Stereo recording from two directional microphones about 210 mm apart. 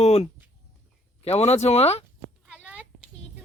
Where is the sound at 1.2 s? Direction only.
30° left (ahead or behind).